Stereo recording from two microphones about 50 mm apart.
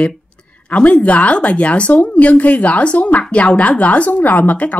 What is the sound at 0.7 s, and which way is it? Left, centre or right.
Speech, left.